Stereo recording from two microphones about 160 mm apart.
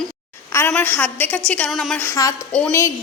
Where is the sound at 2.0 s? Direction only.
20° left (ahead or behind).